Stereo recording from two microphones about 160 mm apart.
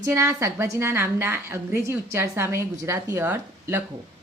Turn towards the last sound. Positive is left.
turn(degrees=-15)  # may be behind; listen again after turning